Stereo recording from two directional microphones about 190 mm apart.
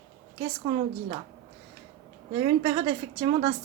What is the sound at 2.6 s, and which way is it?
Speech, 30° right (ahead or behind).